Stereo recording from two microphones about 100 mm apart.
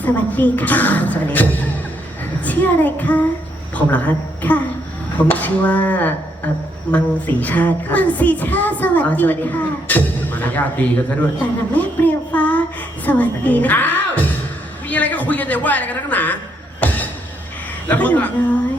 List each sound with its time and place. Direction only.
0.0 s speech: 15° left (ahead or behind)
11.7 s child singing: 15° left (ahead or behind)
13.1 s a woman's voice: 15° left (ahead or behind)
16.8 s a sound: 15° left (ahead or behind)
17.8 s speech: 15° left (ahead or behind)